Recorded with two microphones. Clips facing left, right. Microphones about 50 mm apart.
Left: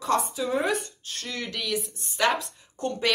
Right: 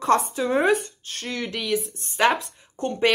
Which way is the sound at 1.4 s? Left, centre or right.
Centre.